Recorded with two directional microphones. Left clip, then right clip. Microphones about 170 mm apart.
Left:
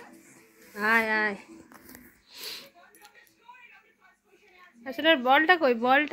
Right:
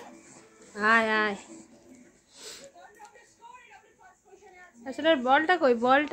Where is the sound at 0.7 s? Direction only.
20° left (ahead or behind).